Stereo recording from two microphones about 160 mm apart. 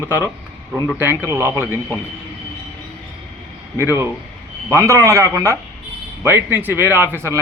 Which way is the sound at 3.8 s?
15° right (ahead or behind).